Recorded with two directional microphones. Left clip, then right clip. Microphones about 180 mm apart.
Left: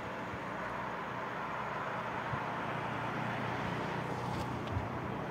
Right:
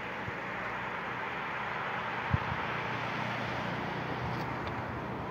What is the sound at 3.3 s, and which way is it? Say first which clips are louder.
Vehicle: right 2 dB; 65° right (ahead or behind).